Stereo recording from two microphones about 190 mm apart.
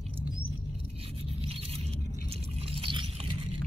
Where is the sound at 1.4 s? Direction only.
30° right (ahead or behind).